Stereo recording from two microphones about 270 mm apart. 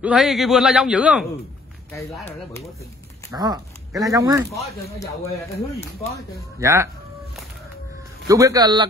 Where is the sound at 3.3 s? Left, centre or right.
Centre.